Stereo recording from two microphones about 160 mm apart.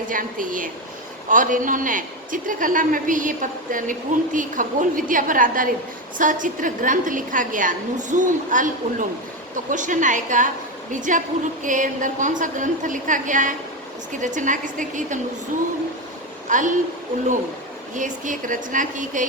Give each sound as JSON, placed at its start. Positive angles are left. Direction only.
{"t": 0.1, "sound": "a man's voice", "side_deg": -55}
{"t": 16.5, "sound": "a woman's voice", "side_deg": -50}
{"t": 17.9, "sound": "a man's voice", "side_deg": -55}